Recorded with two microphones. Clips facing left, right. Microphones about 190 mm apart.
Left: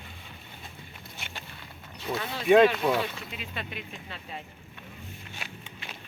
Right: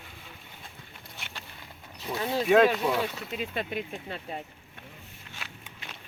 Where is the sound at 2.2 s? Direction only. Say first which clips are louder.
Right 7 dB; 35° right (ahead or behind).